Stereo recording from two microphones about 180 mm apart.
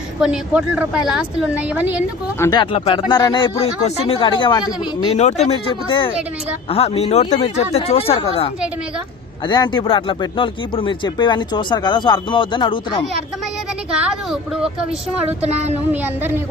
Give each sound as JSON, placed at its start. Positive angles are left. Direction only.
{"t": 0.2, "sound": "a woman's voice", "side_deg": -5}
{"t": 2.4, "sound": "a man's voice", "side_deg": 25}
{"t": 9.5, "sound": "speech", "side_deg": 25}
{"t": 14.3, "sound": "speech", "side_deg": -5}
{"t": 15.4, "sound": "speech", "side_deg": -35}
{"t": 15.9, "sound": "a woman's voice", "side_deg": -10}